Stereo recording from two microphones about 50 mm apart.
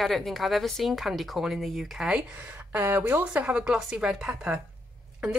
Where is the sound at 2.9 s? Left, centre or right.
Right.